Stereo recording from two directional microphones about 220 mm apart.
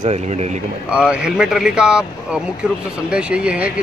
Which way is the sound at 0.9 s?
5° right (ahead or behind).